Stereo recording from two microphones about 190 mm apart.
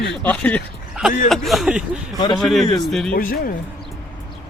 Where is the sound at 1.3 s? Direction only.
Centre (ahead or behind).